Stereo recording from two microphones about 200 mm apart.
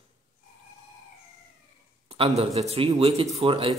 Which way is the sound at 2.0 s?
30° right (ahead or behind).